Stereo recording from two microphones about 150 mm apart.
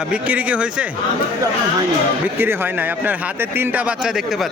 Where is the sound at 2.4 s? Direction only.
15° right (ahead or behind).